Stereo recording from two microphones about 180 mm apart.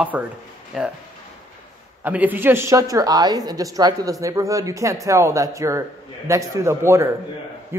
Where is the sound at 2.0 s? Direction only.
10° right (ahead or behind).